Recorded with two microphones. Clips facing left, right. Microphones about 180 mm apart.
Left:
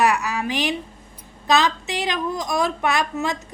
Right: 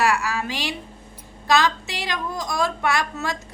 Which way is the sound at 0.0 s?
20° left (ahead or behind).